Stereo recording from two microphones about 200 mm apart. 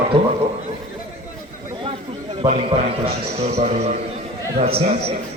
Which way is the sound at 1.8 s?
25° right (ahead or behind).